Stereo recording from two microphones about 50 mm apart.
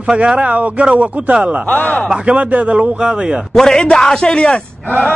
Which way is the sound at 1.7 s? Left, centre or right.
Left.